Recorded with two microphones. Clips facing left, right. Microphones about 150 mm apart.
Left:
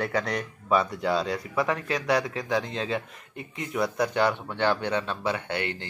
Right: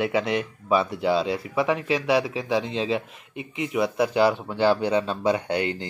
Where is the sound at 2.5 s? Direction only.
25° right (ahead or behind).